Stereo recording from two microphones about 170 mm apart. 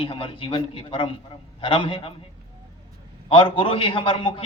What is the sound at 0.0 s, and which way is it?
A man's voice, 30° left (ahead or behind).